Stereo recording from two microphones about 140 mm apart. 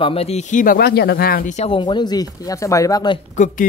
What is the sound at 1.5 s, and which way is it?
Speech, 45° left (ahead or behind).